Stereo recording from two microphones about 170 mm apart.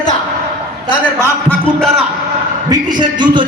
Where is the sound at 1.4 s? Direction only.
5° left (ahead or behind).